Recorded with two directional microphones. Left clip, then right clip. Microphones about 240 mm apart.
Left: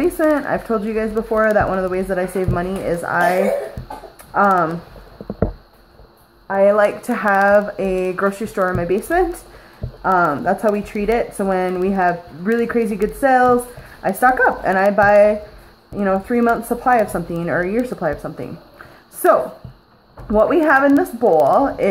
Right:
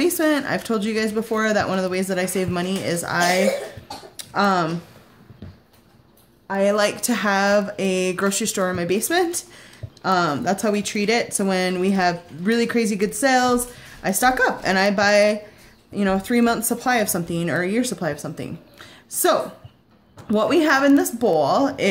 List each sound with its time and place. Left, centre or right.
0.0 s speech: right
6.4 s speech: right
20.2 s speech: right